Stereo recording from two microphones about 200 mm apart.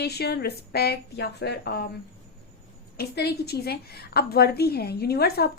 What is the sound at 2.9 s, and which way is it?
A woman's voice, 55° left (ahead or behind).